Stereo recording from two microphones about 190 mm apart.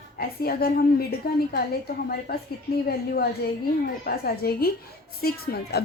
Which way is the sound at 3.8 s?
55° left (ahead or behind).